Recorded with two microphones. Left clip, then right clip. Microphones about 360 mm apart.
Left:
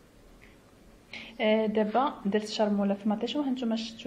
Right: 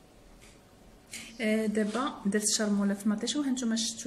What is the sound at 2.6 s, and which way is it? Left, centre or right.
Speech, left.